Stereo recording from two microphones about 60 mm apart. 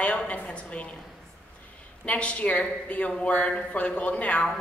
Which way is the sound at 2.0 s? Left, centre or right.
Left.